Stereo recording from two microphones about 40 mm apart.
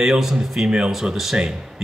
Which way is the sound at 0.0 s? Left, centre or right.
Centre.